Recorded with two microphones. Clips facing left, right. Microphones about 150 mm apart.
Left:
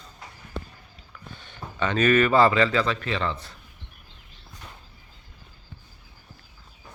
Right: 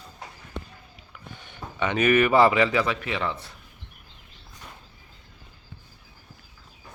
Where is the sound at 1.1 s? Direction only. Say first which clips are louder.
Even; 15° right (ahead or behind).